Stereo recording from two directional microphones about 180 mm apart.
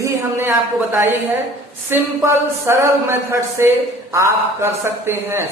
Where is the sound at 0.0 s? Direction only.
15° right (ahead or behind).